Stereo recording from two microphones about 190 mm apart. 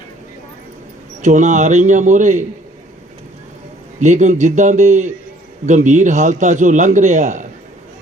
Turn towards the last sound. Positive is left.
turn(degrees=-40)  # may be behind; listen again after turning